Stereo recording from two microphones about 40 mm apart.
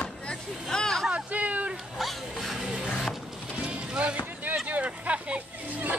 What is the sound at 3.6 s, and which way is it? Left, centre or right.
Music, right.